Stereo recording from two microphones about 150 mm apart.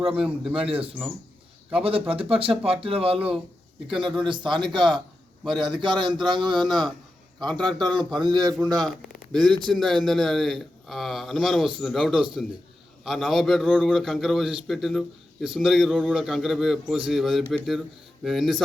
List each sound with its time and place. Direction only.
0.2 s a man's voice: 5° right (ahead or behind)
0.5 s a man's voice: 40° right (ahead or behind)
6.7 s a man's voice: centre (ahead or behind)
7.8 s a man's voice: 30° right (ahead or behind)
8.9 s a man's voice: centre (ahead or behind)